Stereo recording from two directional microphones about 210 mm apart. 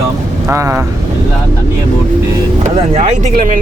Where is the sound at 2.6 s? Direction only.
35° right (ahead or behind).